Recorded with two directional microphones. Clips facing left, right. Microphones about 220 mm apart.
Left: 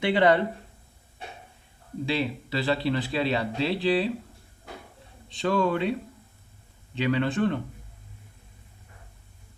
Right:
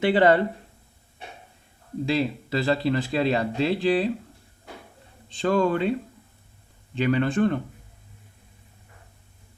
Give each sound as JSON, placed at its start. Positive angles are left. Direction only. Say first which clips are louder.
{"t": 0.0, "sound": "speech", "louder": "right 3 dB", "side_deg": -45}
{"t": 2.0, "sound": "speech", "louder": "right 3 dB", "side_deg": -45}
{"t": 5.4, "sound": "speech", "louder": "right 3 dB", "side_deg": -45}
{"t": 6.9, "sound": "speech", "louder": "right 3 dB", "side_deg": -45}